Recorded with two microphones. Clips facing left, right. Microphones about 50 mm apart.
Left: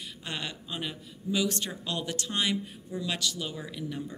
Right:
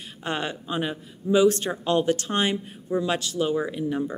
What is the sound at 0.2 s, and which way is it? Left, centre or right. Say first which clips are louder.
Speech: right 9 dB; right.